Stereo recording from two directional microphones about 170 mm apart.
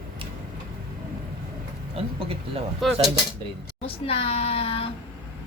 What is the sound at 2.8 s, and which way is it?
Speech, centre (ahead or behind).